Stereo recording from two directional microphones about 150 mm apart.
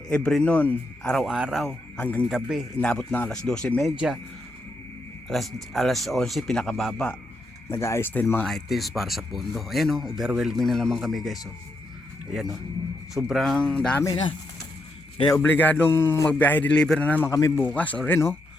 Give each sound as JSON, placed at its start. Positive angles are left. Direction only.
{"t": 0.1, "sound": "speech", "side_deg": 5}
{"t": 2.0, "sound": "a man's voice", "side_deg": 10}
{"t": 2.3, "sound": "a man's voice", "side_deg": 0}
{"t": 5.3, "sound": "speech", "side_deg": 0}
{"t": 7.7, "sound": "a man's voice", "side_deg": 15}
{"t": 8.4, "sound": "speech", "side_deg": 0}
{"t": 15.4, "sound": "a man's voice", "side_deg": 10}